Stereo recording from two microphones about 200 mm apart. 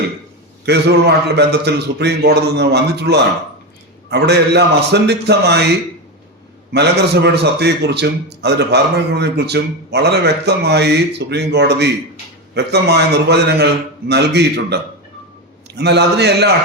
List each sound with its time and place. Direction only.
0.6 s a man's voice: 55° right (ahead or behind)
6.7 s a man's voice: 55° right (ahead or behind)